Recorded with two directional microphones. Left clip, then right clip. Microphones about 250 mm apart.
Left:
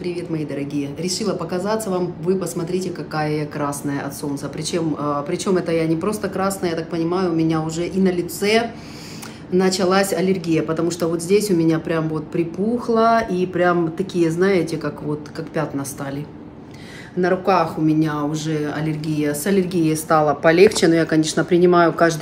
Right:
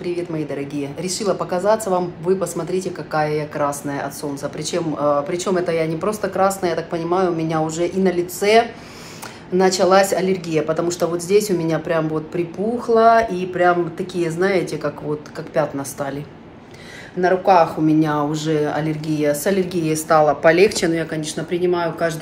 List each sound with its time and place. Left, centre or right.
0.7 s speech: right
1.2 s speech: centre
17.2 s speech: centre; by 22.1 s left